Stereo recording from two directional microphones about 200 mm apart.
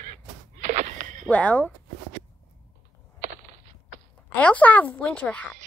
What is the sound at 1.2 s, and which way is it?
Speech, 5° left (ahead or behind).